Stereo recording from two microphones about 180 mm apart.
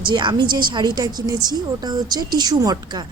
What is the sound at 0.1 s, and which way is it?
Speech, 25° right (ahead or behind).